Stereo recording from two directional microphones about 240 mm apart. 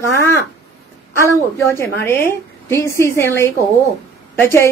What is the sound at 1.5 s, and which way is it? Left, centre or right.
A woman's voice, centre.